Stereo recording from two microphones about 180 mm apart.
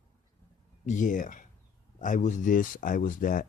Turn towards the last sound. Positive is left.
turn(degrees=50)  # may be behind; listen again after turning